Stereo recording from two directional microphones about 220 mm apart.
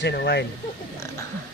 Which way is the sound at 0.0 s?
50° left (ahead or behind).